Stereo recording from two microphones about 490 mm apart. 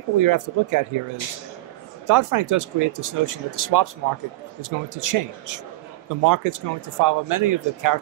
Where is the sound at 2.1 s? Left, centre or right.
Right.